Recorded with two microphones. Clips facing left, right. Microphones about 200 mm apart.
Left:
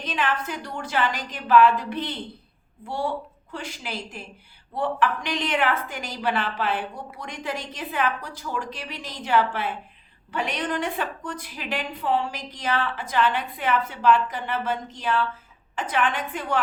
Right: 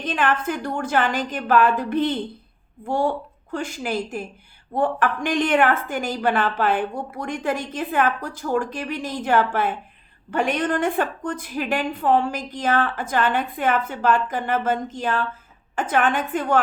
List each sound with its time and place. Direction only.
0.0 s a woman's voice: 50° right (ahead or behind)